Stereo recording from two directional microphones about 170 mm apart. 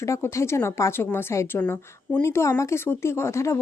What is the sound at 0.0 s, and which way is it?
A woman's voice, 15° left (ahead or behind).